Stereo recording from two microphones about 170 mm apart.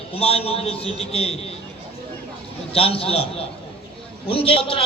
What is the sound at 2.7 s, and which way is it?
A man's voice, 35° left (ahead or behind).